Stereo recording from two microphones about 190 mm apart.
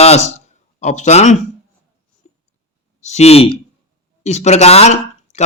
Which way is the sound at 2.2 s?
35° left (ahead or behind).